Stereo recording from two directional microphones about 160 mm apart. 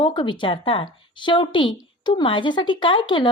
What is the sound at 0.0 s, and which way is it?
A woman's voice, 30° left (ahead or behind).